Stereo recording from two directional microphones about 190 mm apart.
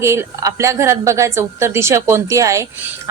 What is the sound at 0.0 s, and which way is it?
A woman's voice, 15° right (ahead or behind).